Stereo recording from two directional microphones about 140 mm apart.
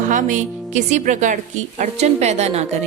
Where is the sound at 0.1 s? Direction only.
65° right (ahead or behind).